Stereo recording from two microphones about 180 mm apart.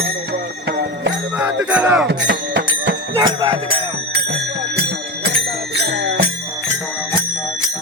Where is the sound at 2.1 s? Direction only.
75° right (ahead or behind).